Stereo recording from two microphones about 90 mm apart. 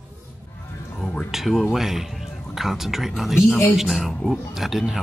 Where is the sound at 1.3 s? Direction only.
Centre (ahead or behind).